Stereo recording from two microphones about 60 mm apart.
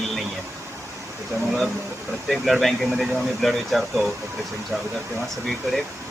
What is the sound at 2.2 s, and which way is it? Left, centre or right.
Speech, centre.